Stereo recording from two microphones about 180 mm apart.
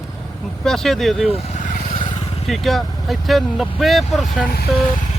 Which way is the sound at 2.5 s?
Centre (ahead or behind).